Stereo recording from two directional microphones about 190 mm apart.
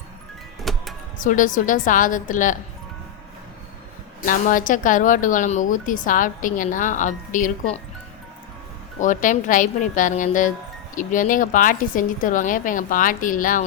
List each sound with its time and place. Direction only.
0.6 s music: centre (ahead or behind)
1.2 s a woman's voice: 45° left (ahead or behind)
4.3 s a woman's voice: 45° left (ahead or behind)
9.0 s a woman's voice: 40° left (ahead or behind)